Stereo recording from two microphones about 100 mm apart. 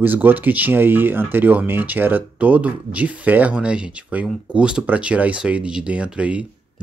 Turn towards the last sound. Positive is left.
turn(degrees=-10)  # may be behind; listen again after turning